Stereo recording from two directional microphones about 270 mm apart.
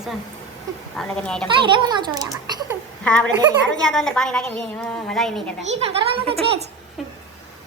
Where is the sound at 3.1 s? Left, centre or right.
Centre.